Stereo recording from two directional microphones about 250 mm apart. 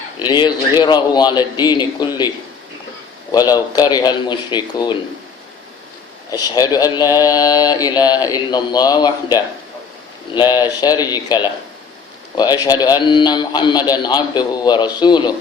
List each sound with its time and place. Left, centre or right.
0.3 s speech: centre
3.3 s speech: centre
6.3 s speech: centre